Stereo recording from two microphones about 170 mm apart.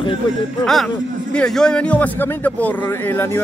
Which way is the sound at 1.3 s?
5° left (ahead or behind).